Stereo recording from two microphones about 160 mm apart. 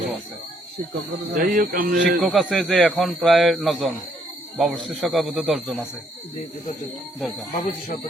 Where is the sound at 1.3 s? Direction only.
60° right (ahead or behind).